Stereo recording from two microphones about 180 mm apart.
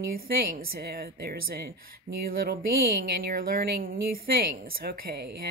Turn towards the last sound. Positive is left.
turn(degrees=-60)  # may be behind; listen again after turning